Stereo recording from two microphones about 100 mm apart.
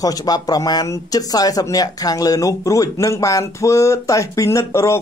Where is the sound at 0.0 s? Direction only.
40° left (ahead or behind).